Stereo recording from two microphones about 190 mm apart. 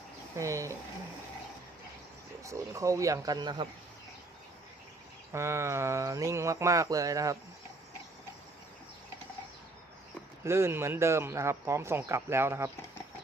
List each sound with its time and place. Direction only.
0.3 s speech: 15° right (ahead or behind)
2.4 s speech: 15° right (ahead or behind)
5.3 s speech: 15° right (ahead or behind)
10.4 s speech: 15° right (ahead or behind)